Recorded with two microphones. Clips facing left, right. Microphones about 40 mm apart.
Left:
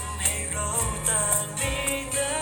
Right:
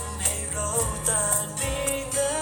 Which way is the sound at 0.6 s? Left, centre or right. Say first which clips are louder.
Right 3 dB; left.